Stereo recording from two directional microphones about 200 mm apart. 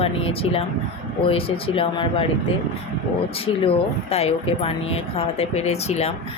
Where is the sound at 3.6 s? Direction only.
30° left (ahead or behind).